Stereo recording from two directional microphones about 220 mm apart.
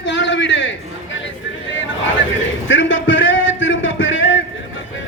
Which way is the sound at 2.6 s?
55° left (ahead or behind).